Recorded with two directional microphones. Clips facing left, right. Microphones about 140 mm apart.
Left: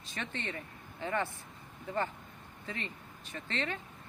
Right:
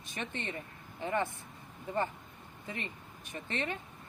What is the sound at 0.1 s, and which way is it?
Speech, 15° right (ahead or behind).